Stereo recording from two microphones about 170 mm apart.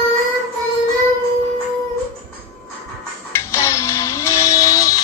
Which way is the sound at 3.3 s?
15° left (ahead or behind).